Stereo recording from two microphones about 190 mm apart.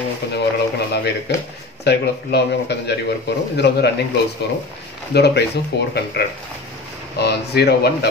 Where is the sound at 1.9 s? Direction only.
60° left (ahead or behind).